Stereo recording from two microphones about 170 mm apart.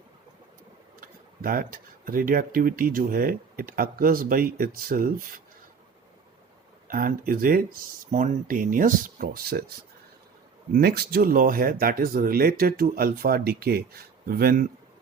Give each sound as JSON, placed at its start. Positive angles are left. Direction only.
{"t": 1.0, "sound": "speech", "side_deg": -55}
{"t": 6.8, "sound": "speech", "side_deg": -55}
{"t": 10.8, "sound": "speech", "side_deg": -65}